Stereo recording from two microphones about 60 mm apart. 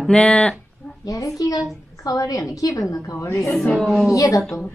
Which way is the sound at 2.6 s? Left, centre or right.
Left.